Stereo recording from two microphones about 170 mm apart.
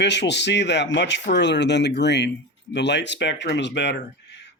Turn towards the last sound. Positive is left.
turn(degrees=85)